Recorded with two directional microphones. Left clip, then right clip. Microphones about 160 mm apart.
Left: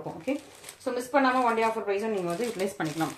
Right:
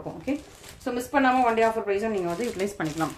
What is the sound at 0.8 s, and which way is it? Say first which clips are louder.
Speech: right 1 dB; 45° right (ahead or behind).